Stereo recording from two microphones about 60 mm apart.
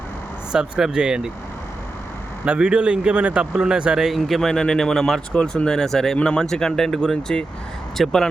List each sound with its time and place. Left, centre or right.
0.5 s speech: centre
2.4 s a man's voice: centre
5.3 s speech: centre